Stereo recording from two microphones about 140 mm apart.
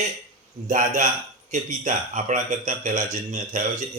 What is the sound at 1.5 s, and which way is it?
Speech, 60° right (ahead or behind).